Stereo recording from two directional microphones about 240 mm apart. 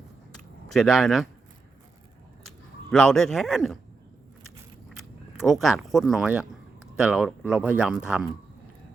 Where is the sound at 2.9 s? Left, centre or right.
Centre.